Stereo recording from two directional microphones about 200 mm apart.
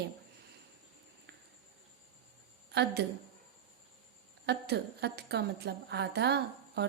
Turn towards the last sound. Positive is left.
turn(degrees=-55)  # may be behind; listen again after turning